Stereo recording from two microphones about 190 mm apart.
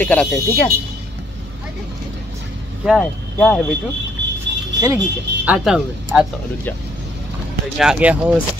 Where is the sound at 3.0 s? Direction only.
5° left (ahead or behind).